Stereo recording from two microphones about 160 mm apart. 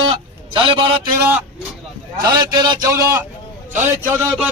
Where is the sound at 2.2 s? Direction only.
25° right (ahead or behind).